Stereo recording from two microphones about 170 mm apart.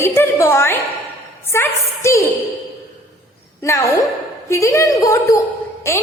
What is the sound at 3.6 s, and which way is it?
A woman's voice, 20° left (ahead or behind).